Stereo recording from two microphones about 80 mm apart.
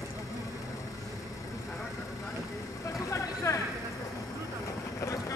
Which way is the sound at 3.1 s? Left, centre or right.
Left.